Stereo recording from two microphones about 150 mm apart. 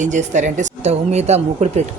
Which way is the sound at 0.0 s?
55° right (ahead or behind).